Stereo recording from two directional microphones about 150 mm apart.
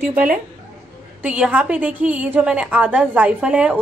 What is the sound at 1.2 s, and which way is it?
A woman's voice, 10° right (ahead or behind).